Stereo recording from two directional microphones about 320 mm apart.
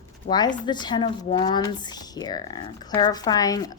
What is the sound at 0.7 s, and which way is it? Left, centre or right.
Speech, centre.